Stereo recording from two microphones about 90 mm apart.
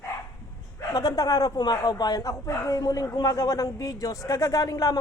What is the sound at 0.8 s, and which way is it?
A man's voice, 45° left (ahead or behind).